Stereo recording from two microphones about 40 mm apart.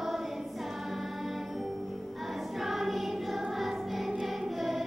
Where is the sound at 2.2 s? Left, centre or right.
Centre.